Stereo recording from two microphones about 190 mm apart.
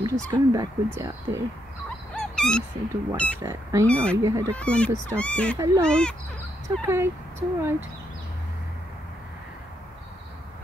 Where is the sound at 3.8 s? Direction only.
5° left (ahead or behind).